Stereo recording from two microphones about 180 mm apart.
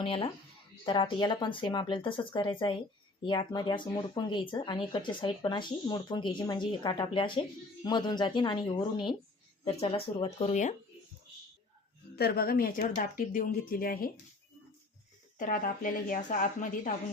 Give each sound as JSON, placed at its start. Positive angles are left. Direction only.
{"t": 0.0, "sound": "speech", "side_deg": 30}
{"t": 12.1, "sound": "speech", "side_deg": 60}
{"t": 15.4, "sound": "speech", "side_deg": 50}